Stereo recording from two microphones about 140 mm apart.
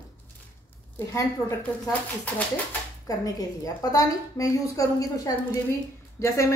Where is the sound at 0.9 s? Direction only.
25° left (ahead or behind).